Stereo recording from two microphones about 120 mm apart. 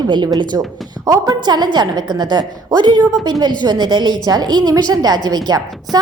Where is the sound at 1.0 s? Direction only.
30° right (ahead or behind).